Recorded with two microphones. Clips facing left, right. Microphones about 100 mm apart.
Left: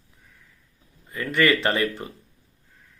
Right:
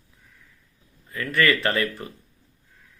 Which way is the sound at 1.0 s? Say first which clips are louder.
Left 1 dB; 25° left (ahead or behind).